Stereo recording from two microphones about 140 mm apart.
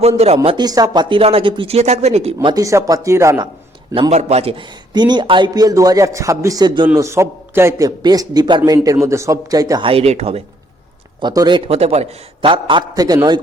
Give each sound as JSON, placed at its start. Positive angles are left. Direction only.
{"t": 0.4, "sound": "a man's voice", "side_deg": -30}
{"t": 2.4, "sound": "a man's voice", "side_deg": -30}
{"t": 4.1, "sound": "speech", "side_deg": -50}
{"t": 4.9, "sound": "a man's voice", "side_deg": -30}
{"t": 9.8, "sound": "speech", "side_deg": -45}
{"t": 11.2, "sound": "a man's voice", "side_deg": -30}